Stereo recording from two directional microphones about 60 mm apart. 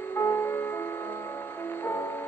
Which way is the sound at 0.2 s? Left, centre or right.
Left.